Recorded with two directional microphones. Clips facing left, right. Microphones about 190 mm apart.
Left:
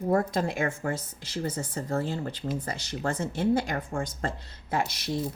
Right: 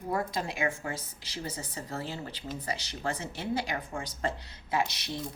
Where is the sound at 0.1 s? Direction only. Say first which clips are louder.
Left 6 dB; 50° left (ahead or behind).